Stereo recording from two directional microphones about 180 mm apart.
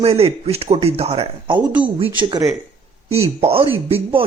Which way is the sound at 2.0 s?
25° right (ahead or behind).